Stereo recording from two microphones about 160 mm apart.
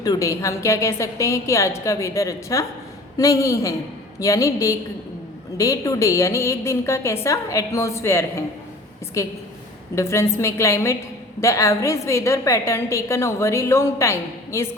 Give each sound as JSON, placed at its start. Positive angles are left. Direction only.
{"t": 0.0, "sound": "a woman's voice", "side_deg": 20}